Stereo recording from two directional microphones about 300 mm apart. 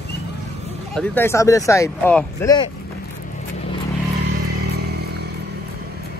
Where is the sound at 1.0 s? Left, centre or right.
Centre.